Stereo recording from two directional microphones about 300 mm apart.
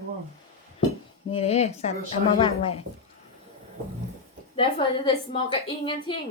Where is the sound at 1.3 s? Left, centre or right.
Left.